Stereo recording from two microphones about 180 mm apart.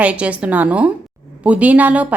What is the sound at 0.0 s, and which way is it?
A woman's voice, 5° right (ahead or behind).